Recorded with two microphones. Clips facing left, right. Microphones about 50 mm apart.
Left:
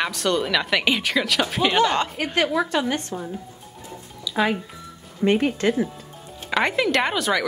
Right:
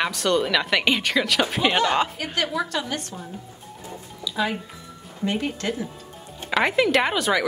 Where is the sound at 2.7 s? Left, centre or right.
Left.